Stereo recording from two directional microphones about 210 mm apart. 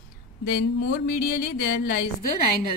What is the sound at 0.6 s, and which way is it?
A woman's voice, 50° left (ahead or behind).